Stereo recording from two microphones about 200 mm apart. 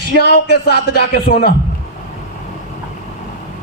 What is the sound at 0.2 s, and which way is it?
Speech, 55° left (ahead or behind).